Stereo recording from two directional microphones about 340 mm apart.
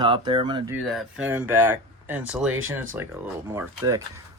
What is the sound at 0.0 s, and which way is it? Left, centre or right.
Speech, centre.